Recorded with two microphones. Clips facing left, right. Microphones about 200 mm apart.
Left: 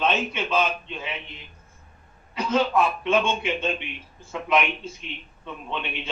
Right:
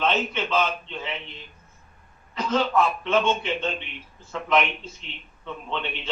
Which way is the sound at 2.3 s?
10° left (ahead or behind).